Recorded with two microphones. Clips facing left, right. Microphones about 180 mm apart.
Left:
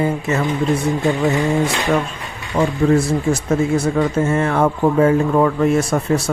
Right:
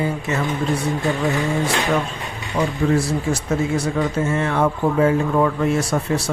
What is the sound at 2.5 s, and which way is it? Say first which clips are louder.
Speech: left 4 dB; 45° left (ahead or behind).